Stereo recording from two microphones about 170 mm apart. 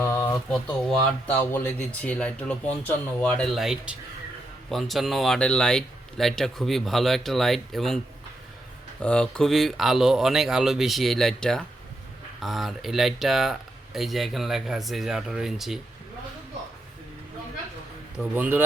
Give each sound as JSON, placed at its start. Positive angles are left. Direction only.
{"t": 0.0, "sound": "a sound", "side_deg": 15}
{"t": 0.5, "sound": "speech", "side_deg": 5}
{"t": 9.0, "sound": "speech", "side_deg": 5}
{"t": 18.2, "sound": "a man's voice", "side_deg": -10}